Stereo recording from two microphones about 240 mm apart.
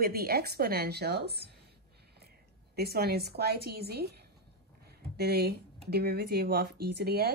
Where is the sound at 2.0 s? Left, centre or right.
Right.